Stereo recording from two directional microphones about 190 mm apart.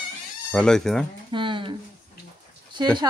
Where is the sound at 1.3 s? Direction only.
25° right (ahead or behind).